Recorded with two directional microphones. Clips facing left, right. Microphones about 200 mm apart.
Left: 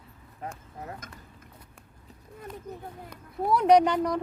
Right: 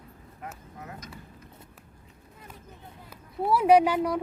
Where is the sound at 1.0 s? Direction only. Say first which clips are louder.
Right 2 dB; 50° left (ahead or behind).